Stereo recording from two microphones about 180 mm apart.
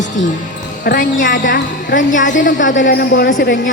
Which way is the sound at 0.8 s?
50° left (ahead or behind).